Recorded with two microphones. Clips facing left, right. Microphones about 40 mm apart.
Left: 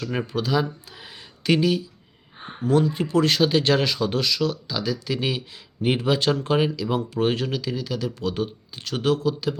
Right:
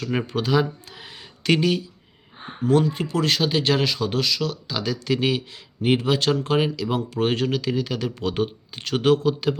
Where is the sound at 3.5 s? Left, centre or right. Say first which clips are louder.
Left 1 dB; right.